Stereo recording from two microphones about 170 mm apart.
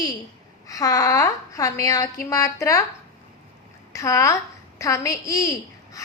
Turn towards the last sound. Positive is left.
turn(degrees=20)  # may be behind; listen again after turning